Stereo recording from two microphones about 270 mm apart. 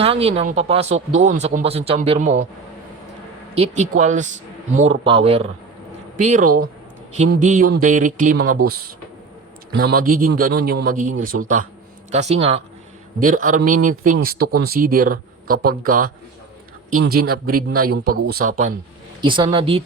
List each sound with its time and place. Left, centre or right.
0.0 s speech: right
3.5 s speech: right
9.7 s speech: right
17.2 s a man's voice: right
17.9 s speech: right
19.2 s a woman's voice: centre